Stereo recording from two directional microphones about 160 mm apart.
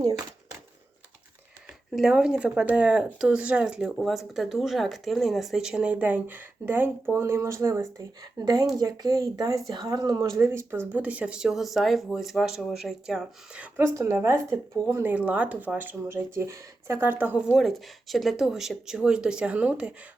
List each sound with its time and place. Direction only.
2.0 s speech: 5° right (ahead or behind)